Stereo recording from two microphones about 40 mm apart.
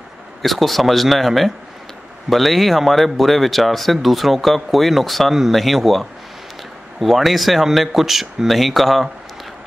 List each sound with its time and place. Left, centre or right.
0.4 s speech: centre